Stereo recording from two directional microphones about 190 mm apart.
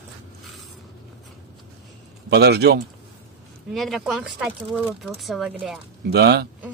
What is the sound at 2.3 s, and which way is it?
Speech, 60° right (ahead or behind).